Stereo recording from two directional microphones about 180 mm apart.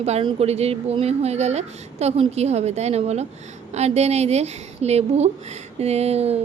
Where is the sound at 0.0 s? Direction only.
30° right (ahead or behind).